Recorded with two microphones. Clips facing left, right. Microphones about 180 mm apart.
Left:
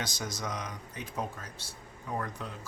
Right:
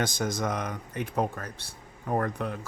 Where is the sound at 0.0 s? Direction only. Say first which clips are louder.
Right 8 dB; 55° right (ahead or behind).